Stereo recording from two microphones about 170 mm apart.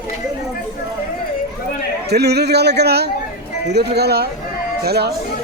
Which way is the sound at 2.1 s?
75° right (ahead or behind).